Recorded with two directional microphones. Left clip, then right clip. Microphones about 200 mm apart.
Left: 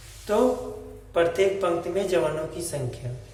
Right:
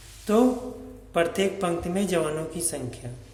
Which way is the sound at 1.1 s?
40° right (ahead or behind).